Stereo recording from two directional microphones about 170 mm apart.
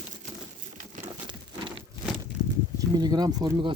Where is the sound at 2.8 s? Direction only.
25° right (ahead or behind).